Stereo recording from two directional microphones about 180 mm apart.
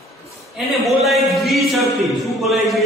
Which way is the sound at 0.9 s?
Centre (ahead or behind).